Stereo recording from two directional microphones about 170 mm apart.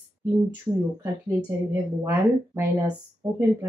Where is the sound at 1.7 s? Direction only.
15° right (ahead or behind).